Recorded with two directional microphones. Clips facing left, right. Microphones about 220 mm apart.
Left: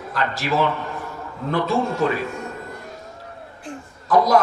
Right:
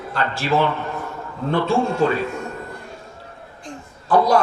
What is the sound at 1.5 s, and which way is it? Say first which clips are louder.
Speech: right 2 dB; 30° right (ahead or behind).